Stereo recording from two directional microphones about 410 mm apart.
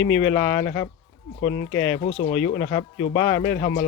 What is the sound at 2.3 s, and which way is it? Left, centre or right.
Speech, centre.